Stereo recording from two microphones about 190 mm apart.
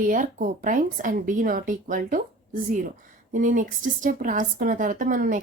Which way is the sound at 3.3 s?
45° right (ahead or behind).